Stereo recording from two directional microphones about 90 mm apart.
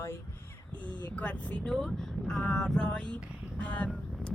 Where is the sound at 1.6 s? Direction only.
5° left (ahead or behind).